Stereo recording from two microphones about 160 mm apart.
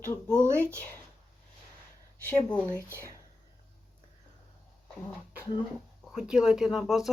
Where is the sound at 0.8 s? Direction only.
10° left (ahead or behind).